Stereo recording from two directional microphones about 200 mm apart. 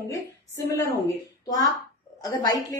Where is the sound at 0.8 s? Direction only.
15° left (ahead or behind).